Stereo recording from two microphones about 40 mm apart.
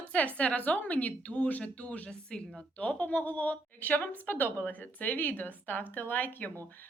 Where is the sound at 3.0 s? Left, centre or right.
Left.